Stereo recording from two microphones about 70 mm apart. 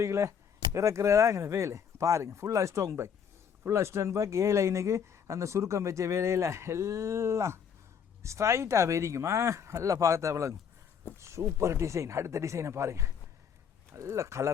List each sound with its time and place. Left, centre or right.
0.0 s speech: right